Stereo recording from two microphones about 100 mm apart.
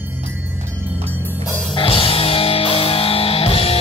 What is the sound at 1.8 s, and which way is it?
Music, 65° left (ahead or behind).